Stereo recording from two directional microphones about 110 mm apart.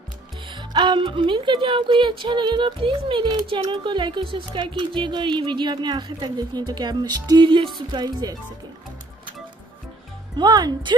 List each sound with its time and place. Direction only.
0.5 s speech: 45° right (ahead or behind)
10.3 s speech: 40° right (ahead or behind)